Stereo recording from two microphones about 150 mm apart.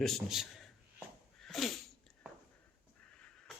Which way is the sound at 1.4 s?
Centre (ahead or behind).